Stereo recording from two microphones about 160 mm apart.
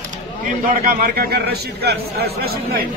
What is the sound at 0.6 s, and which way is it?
A man's voice, 65° right (ahead or behind).